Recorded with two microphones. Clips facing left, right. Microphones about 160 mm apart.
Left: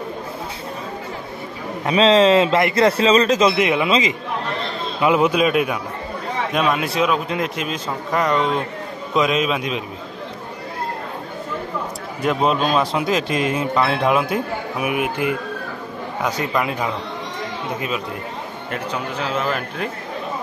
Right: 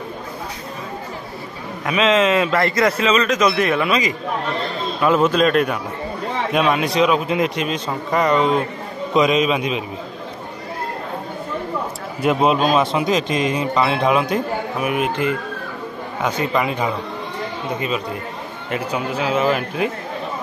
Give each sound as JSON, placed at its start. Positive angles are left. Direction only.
{"t": 1.9, "sound": "a man's voice", "side_deg": 30}
{"t": 12.2, "sound": "a man's voice", "side_deg": -5}
{"t": 16.2, "sound": "a man's voice", "side_deg": 0}
{"t": 18.7, "sound": "speech", "side_deg": -10}